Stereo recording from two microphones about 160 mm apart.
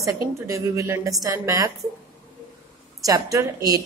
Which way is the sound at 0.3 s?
20° right (ahead or behind).